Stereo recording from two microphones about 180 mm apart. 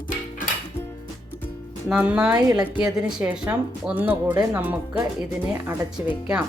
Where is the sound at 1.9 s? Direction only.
10° right (ahead or behind).